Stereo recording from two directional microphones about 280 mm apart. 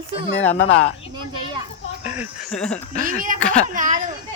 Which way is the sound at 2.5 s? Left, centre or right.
Centre.